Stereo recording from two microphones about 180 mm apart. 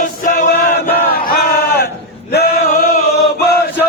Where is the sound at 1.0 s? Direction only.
55° left (ahead or behind).